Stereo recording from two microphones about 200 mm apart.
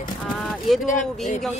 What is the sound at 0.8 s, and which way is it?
Speech, 40° left (ahead or behind).